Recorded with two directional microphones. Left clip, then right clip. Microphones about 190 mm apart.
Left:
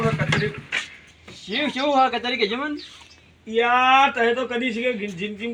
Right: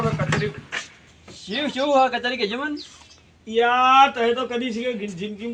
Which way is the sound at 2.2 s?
15° right (ahead or behind).